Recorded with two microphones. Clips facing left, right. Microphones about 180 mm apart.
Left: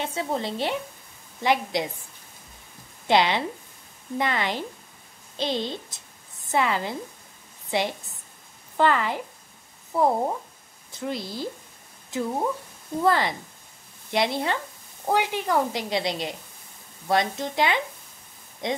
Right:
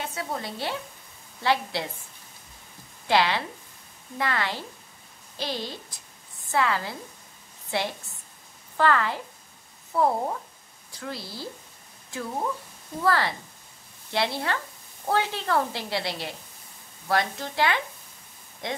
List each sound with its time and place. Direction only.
0.0 s a woman's voice: 25° left (ahead or behind)
3.1 s a woman's voice: 20° left (ahead or behind)